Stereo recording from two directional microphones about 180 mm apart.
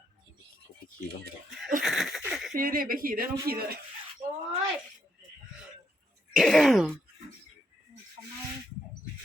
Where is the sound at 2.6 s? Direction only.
50° right (ahead or behind).